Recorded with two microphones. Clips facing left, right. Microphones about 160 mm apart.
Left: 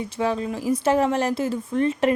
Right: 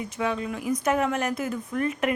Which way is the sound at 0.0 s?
35° left (ahead or behind).